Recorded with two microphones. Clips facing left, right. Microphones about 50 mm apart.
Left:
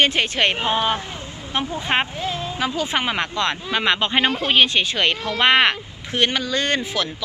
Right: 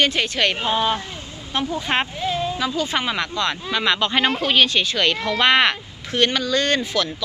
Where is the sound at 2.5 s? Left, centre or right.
Left.